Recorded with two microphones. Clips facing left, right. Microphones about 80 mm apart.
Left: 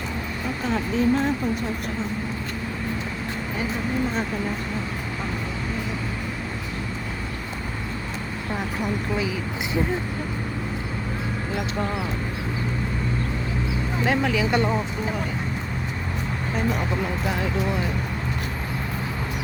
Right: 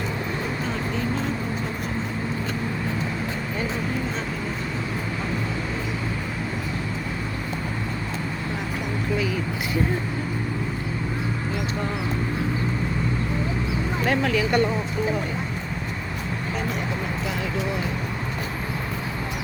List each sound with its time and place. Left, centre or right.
14.0 s speech: centre